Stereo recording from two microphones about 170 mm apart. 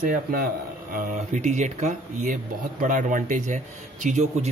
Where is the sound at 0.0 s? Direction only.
55° right (ahead or behind).